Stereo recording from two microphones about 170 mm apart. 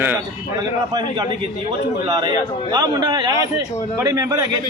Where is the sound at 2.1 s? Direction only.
20° right (ahead or behind).